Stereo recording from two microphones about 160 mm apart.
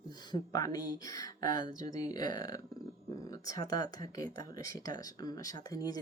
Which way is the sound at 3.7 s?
20° left (ahead or behind).